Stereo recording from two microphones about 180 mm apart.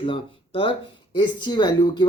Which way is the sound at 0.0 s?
30° left (ahead or behind).